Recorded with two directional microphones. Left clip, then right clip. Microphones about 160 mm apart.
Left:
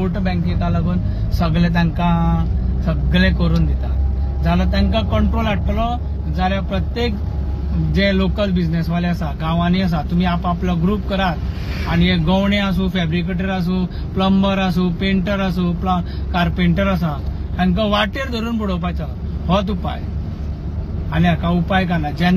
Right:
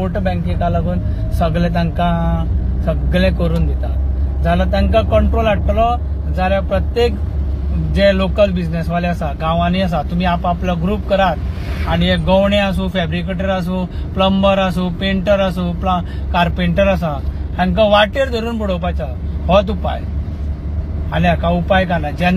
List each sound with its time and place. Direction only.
0.0 s speech: centre (ahead or behind)
8.2 s speech: 10° left (ahead or behind)
21.1 s speech: 10° left (ahead or behind)